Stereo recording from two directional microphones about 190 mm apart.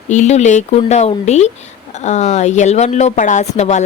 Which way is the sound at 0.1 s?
35° left (ahead or behind).